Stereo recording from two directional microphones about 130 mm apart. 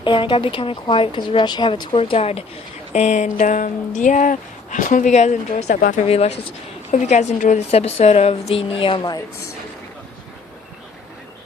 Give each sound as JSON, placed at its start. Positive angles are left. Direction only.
{"t": 0.0, "sound": "speech", "side_deg": 40}
{"t": 2.9, "sound": "speech", "side_deg": 60}
{"t": 6.1, "sound": "a woman's voice", "side_deg": 50}
{"t": 6.9, "sound": "a woman's voice", "side_deg": 65}
{"t": 7.7, "sound": "a woman's voice", "side_deg": 50}